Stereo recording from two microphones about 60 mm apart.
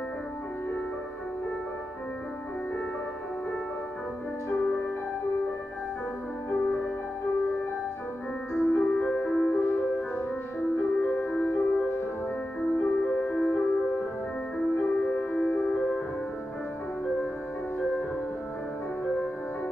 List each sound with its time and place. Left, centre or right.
4.5 s music: left
8.6 s music: left
9.6 s music: left